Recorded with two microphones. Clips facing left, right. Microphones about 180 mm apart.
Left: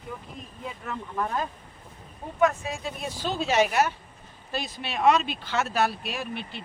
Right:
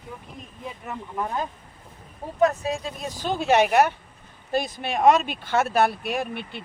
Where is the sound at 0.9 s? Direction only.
15° right (ahead or behind).